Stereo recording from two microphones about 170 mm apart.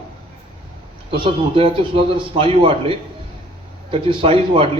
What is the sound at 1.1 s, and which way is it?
A man's voice, 30° right (ahead or behind).